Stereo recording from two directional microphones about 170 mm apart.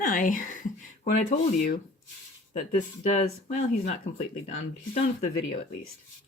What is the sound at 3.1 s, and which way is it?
Speech, 40° left (ahead or behind).